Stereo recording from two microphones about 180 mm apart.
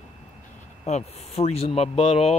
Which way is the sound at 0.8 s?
35° left (ahead or behind).